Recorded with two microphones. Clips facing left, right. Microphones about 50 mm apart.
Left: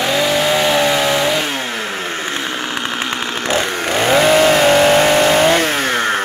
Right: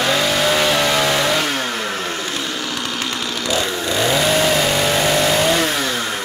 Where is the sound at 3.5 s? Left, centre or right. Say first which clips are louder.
Left 3 dB; left.